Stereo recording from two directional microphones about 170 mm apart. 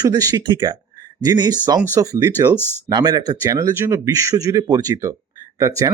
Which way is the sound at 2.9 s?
25° right (ahead or behind).